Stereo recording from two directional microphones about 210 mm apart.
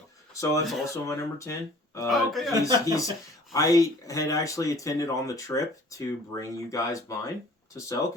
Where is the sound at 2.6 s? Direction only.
15° left (ahead or behind).